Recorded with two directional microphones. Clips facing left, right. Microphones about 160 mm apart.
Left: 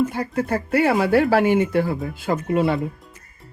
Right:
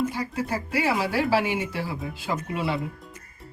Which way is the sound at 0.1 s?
55° left (ahead or behind).